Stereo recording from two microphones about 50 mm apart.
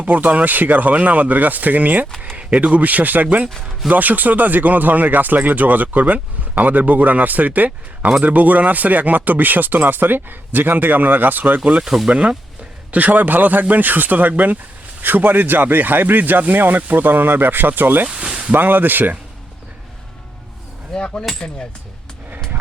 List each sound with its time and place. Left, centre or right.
0.0 s speech: right
11.8 s speech: centre
12.9 s speech: right
18.0 s a sound: right
18.5 s speech: right
20.9 s coin: centre
21.3 s speech: centre